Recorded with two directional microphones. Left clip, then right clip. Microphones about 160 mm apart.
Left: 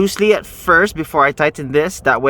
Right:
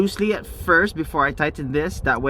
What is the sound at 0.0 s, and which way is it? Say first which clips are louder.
Speech: left 8 dB; 65° left (ahead or behind).